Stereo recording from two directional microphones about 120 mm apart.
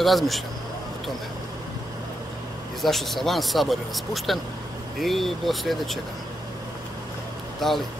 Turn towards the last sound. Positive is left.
turn(degrees=0)  # may be behind; listen again after turning